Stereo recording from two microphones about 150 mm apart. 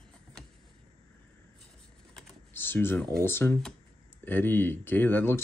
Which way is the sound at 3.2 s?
15° left (ahead or behind).